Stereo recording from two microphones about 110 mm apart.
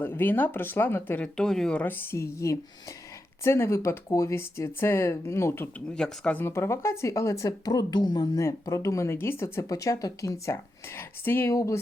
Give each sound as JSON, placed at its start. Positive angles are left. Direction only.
{"t": 0.0, "sound": "speech", "side_deg": 20}
{"t": 1.4, "sound": "a woman's voice", "side_deg": 5}
{"t": 5.9, "sound": "speech", "side_deg": 10}
{"t": 8.4, "sound": "speech", "side_deg": 30}